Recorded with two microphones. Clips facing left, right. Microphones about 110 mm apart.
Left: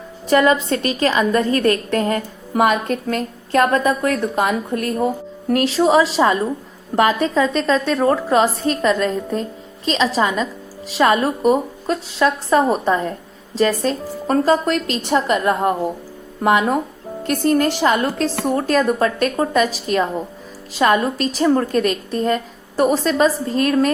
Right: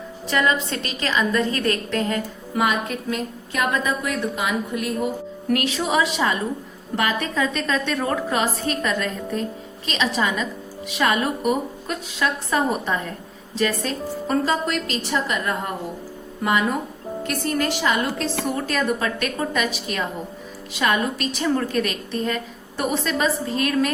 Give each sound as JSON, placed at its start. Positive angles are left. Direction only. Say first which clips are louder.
{"t": 0.3, "sound": "a woman's voice", "louder": "left 7 dB", "side_deg": 45}
{"t": 4.9, "sound": "a woman's voice", "louder": "left 5 dB", "side_deg": 35}
{"t": 7.5, "sound": "a woman's voice", "louder": "left 6 dB", "side_deg": 35}